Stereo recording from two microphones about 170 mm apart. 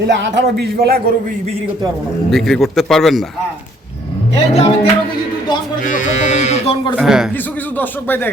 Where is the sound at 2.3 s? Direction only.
Centre (ahead or behind).